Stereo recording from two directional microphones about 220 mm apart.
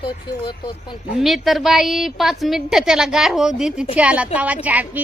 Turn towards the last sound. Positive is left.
turn(degrees=-5)  # may be behind; listen again after turning